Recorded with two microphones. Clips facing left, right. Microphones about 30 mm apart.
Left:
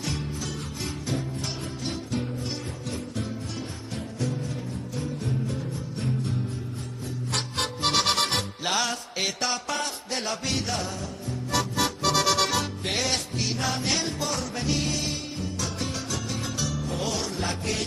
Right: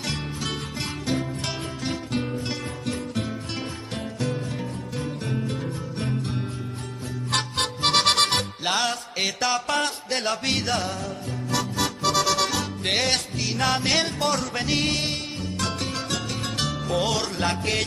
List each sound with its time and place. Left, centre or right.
0.0 s music: right
2.1 s music: right
7.5 s music: right
8.6 s music: right
9.2 s music: centre
9.7 s music: right
12.8 s music: right